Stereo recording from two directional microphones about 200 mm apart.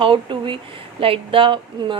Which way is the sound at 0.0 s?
25° right (ahead or behind).